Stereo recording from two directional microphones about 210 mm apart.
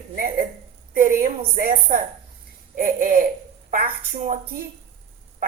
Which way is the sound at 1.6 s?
40° right (ahead or behind).